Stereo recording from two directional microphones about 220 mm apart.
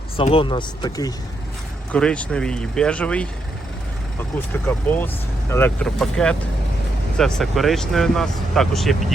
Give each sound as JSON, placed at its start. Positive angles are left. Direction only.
{"t": 0.2, "sound": "speech", "side_deg": 25}
{"t": 1.9, "sound": "speech", "side_deg": 5}
{"t": 4.4, "sound": "speech", "side_deg": 10}